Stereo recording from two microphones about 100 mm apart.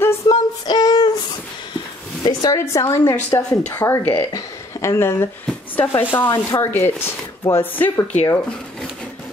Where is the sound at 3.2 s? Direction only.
15° left (ahead or behind).